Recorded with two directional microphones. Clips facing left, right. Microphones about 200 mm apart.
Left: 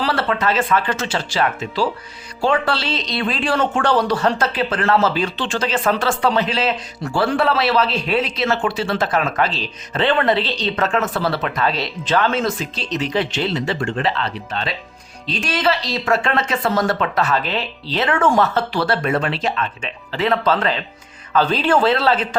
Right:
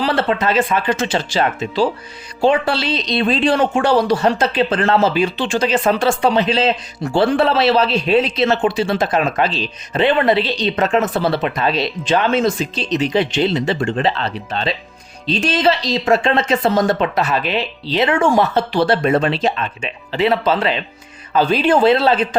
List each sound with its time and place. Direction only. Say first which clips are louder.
0.0 s a woman's voice: right 3 dB; 20° right (ahead or behind)
20.1 s speech: right 2 dB; 10° right (ahead or behind)